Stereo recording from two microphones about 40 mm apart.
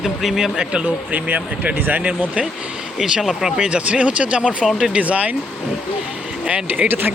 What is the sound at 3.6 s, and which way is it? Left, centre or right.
Speech, right.